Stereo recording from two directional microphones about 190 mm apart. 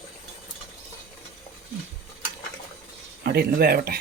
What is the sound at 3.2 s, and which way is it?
Speech, 55° right (ahead or behind).